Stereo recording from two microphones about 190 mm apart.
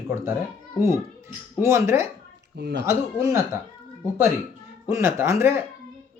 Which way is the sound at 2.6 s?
60° right (ahead or behind).